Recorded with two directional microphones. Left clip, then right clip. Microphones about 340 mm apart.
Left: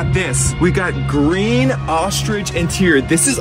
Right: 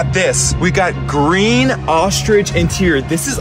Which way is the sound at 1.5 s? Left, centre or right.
Right.